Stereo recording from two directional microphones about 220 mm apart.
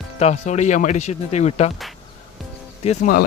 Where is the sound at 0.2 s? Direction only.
30° left (ahead or behind).